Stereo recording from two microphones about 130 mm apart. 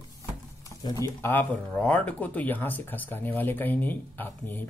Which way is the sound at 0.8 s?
30° left (ahead or behind).